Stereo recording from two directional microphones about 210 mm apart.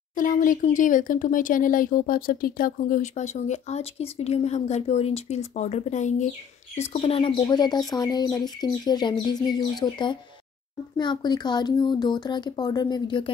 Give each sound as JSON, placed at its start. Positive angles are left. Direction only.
{"t": 0.1, "sound": "speech", "side_deg": 40}